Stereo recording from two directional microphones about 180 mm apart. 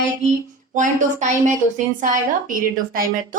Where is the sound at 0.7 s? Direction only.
45° right (ahead or behind).